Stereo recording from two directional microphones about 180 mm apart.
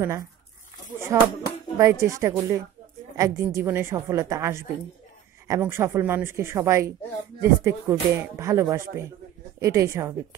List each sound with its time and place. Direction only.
1.1 s speech: 20° right (ahead or behind)